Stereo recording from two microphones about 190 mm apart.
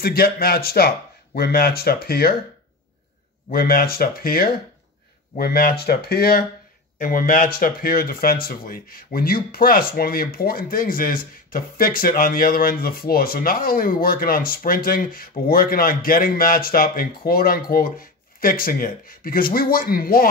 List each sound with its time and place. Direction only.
0.0 s speech: 55° left (ahead or behind)
3.4 s speech: 50° left (ahead or behind)